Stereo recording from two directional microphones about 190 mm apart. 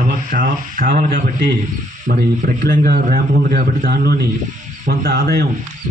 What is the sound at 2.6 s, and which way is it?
A man's voice, 50° right (ahead or behind).